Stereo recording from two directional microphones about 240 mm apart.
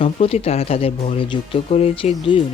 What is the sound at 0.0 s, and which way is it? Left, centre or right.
Speech, left.